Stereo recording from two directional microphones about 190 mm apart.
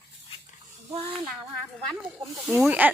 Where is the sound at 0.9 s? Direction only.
25° right (ahead or behind).